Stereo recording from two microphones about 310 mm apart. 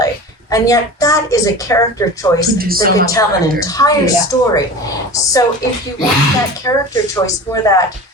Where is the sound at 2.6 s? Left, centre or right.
Right.